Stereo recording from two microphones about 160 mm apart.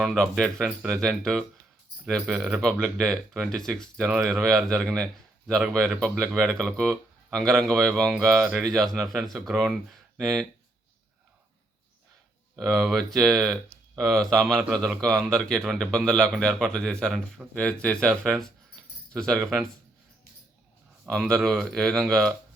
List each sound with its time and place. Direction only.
0.0 s speech: centre (ahead or behind)
12.5 s speech: centre (ahead or behind)
21.1 s speech: 5° left (ahead or behind)